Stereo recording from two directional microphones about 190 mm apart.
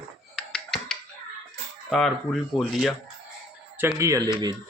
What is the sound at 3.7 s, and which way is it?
Speech, 15° right (ahead or behind).